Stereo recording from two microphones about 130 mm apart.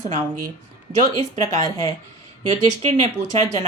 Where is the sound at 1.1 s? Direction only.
30° left (ahead or behind).